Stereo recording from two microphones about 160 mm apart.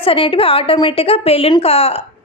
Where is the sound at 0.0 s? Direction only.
35° left (ahead or behind).